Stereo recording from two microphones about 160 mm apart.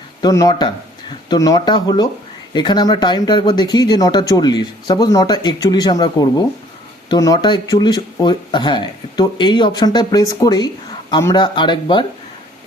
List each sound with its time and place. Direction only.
0.2 s speech: 20° left (ahead or behind)